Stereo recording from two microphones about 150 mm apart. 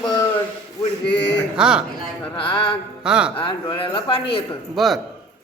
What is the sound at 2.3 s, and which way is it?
Speech, 35° left (ahead or behind).